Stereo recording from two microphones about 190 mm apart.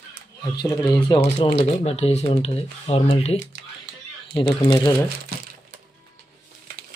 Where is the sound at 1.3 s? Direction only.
30° left (ahead or behind).